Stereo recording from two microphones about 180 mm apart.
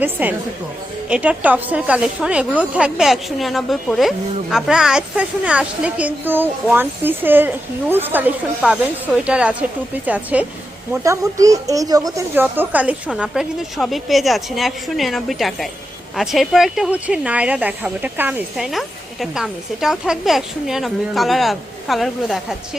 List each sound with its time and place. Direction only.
0.0 s a woman's voice: 10° right (ahead or behind)